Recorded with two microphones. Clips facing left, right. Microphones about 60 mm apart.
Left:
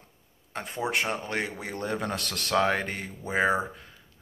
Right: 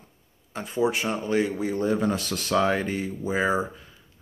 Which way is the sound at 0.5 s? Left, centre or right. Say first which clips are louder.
Right 4 dB; left.